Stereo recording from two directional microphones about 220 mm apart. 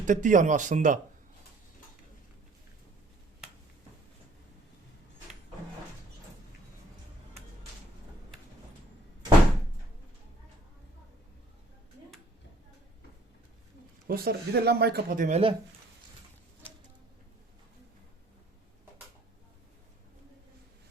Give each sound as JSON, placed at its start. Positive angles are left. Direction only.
{"t": 0.0, "sound": "speech", "side_deg": -35}
{"t": 14.1, "sound": "speech", "side_deg": -45}